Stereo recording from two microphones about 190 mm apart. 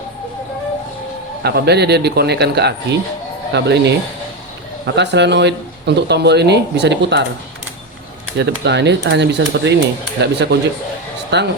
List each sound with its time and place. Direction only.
1.4 s speech: 60° right (ahead or behind)
4.9 s speech: 65° right (ahead or behind)
8.4 s speech: 65° right (ahead or behind)